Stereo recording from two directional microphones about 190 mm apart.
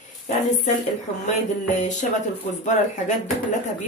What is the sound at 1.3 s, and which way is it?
Speech, 40° left (ahead or behind).